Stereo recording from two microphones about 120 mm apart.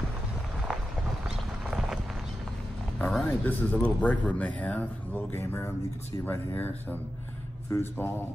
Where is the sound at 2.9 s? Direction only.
5° left (ahead or behind).